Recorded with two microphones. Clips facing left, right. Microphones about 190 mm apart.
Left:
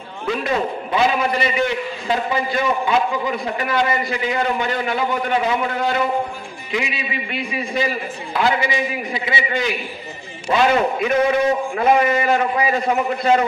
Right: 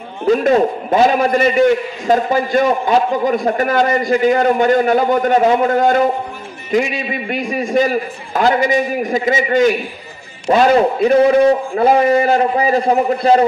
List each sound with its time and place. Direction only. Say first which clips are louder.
0.3 s a man's voice: right 9 dB; 45° right (ahead or behind)